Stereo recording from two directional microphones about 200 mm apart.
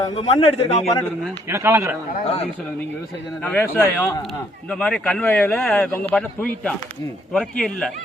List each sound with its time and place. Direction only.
0.0 s a man's voice: 30° left (ahead or behind)
1.5 s a man's voice: 10° right (ahead or behind)
2.2 s a man's voice: 30° left (ahead or behind)
3.4 s speech: 10° left (ahead or behind)